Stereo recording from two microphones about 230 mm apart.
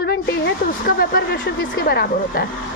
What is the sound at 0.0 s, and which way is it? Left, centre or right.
A woman's voice, left.